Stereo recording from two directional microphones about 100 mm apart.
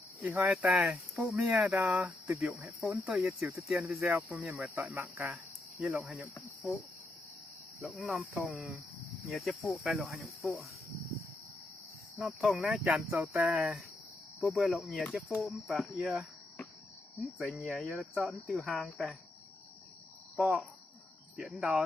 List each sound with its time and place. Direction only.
0.2 s speech: 15° right (ahead or behind)
7.9 s speech: centre (ahead or behind)
12.1 s speech: 5° right (ahead or behind)
17.3 s speech: 5° right (ahead or behind)
20.3 s speech: 10° right (ahead or behind)